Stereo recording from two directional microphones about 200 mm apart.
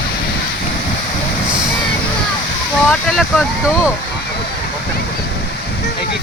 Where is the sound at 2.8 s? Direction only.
Centre (ahead or behind).